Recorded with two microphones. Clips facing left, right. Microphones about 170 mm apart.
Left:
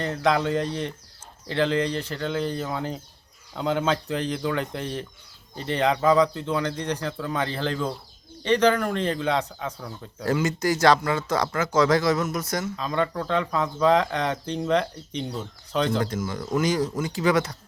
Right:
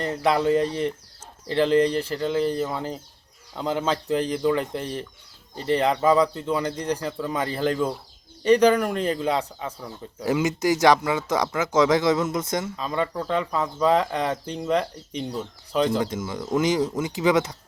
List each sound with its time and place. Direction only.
0.0 s speech: 5° right (ahead or behind)
2.1 s a man's voice: 5° right (ahead or behind)
10.2 s speech: 20° right (ahead or behind)
12.7 s speech: 5° right (ahead or behind)
16.0 s speech: 20° right (ahead or behind)